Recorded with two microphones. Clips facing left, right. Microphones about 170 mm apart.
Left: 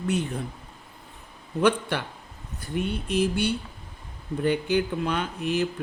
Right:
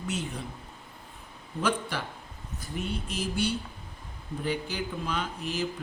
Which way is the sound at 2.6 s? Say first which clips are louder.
Left 5 dB; 60° left (ahead or behind).